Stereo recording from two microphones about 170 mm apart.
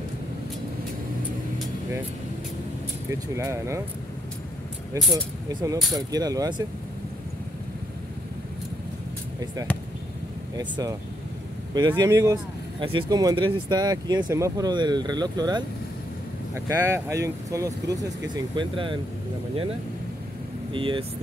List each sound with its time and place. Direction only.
3.1 s speech: 15° right (ahead or behind)
4.9 s speech: 25° right (ahead or behind)
10.5 s speech: 20° right (ahead or behind)
20.7 s speech: 30° right (ahead or behind)